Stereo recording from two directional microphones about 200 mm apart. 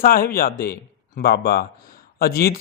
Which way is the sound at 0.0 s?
45° left (ahead or behind).